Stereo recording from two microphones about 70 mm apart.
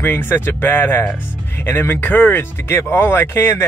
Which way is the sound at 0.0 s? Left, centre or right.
Left.